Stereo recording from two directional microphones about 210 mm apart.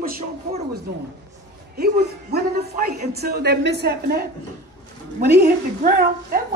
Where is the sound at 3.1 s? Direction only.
50° right (ahead or behind).